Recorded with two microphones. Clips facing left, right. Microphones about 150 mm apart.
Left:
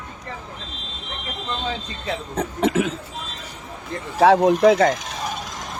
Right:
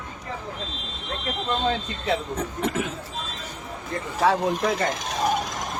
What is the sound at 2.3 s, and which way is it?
Speech, 85° left.